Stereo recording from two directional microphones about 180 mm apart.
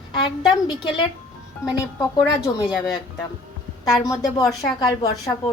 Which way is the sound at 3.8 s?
20° left (ahead or behind).